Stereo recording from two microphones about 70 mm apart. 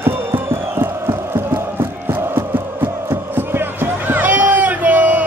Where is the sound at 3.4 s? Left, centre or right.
Right.